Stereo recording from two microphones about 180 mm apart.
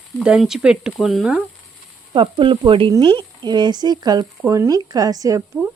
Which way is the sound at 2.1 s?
25° right (ahead or behind).